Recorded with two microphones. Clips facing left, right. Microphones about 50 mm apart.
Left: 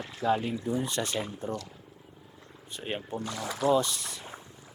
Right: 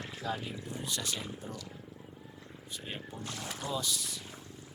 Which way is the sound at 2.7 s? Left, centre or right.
Left.